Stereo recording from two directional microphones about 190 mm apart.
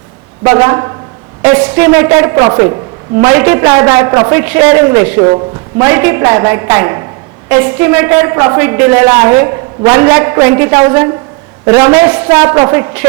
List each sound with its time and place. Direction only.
0.4 s a woman's voice: 15° right (ahead or behind)